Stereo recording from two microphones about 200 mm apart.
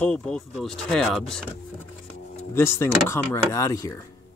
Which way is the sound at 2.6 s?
15° left (ahead or behind).